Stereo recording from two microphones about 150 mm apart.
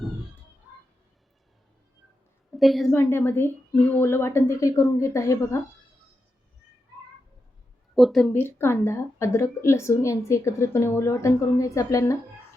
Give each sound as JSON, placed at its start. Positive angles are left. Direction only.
{"t": 2.6, "sound": "a woman's voice", "side_deg": 0}
{"t": 2.9, "sound": "a woman's voice", "side_deg": 15}
{"t": 7.9, "sound": "a woman's voice", "side_deg": 0}
{"t": 8.3, "sound": "a woman's voice", "side_deg": 15}